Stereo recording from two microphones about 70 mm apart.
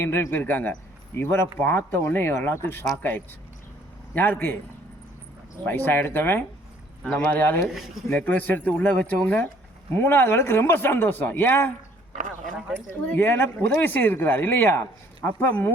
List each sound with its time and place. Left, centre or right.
0.0 s speech: left
5.6 s speech: left
9.9 s speech: left
12.9 s speech: left